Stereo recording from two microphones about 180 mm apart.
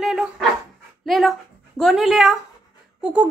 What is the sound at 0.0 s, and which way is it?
Dog, centre (ahead or behind).